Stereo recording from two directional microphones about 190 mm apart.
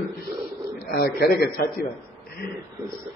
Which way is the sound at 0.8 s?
55° left (ahead or behind).